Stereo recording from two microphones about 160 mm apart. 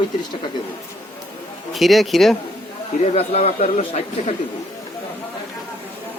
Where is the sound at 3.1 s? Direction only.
40° left (ahead or behind).